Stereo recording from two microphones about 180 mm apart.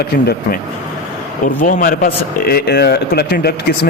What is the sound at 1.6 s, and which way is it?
A man's voice, 50° left (ahead or behind).